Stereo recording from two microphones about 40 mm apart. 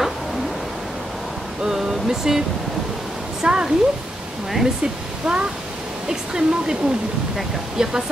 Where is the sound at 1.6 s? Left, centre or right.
Centre.